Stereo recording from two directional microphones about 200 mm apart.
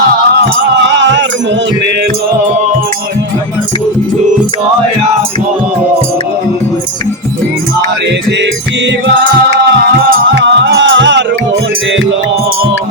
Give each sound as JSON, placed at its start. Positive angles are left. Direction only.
{"t": 0.9, "sound": "music", "side_deg": -65}
{"t": 10.3, "sound": "music", "side_deg": -60}